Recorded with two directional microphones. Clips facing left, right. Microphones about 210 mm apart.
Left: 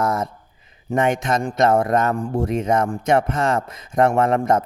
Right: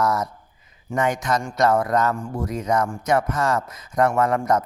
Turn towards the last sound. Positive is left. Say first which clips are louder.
# left 2 dB
turn(degrees=25)  # may be behind; listen again after turning